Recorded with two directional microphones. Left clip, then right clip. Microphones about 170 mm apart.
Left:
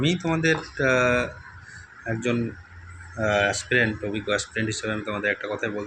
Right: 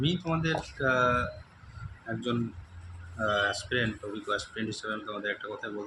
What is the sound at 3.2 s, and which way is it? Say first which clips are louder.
Speech: left 6 dB; 30° left (ahead or behind).